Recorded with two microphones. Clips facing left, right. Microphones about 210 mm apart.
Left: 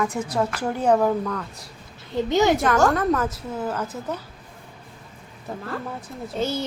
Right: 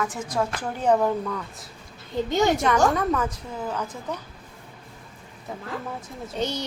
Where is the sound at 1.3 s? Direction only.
5° right (ahead or behind).